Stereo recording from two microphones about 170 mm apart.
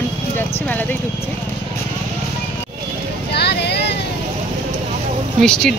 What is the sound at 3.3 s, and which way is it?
Vehicle, 75° left (ahead or behind).